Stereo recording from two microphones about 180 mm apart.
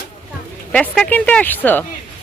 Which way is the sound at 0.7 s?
5° left (ahead or behind).